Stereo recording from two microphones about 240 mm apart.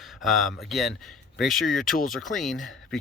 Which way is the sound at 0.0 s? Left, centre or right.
Centre.